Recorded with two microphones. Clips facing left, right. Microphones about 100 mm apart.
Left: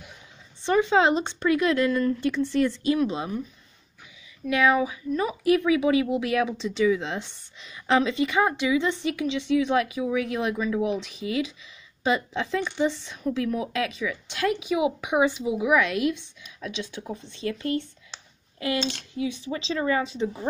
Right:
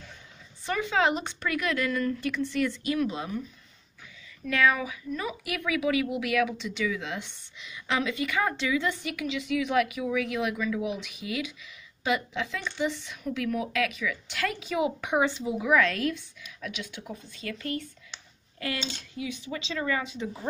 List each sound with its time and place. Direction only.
0.6 s speech: 25° left (ahead or behind)
4.5 s speech: 20° left (ahead or behind)
12.5 s speech: 20° left (ahead or behind)
12.8 s speech: 30° left (ahead or behind)